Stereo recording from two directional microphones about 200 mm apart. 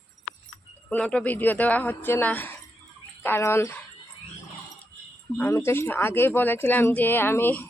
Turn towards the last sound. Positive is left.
turn(degrees=10)  # may be behind; listen again after turning